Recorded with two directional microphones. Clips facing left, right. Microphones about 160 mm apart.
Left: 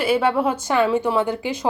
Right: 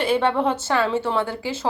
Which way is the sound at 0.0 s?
10° left (ahead or behind).